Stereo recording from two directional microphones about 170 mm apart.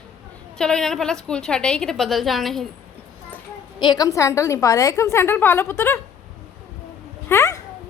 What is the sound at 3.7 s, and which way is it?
A woman's voice, 25° left (ahead or behind).